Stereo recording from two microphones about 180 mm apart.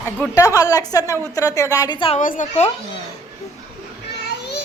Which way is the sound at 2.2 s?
45° left (ahead or behind).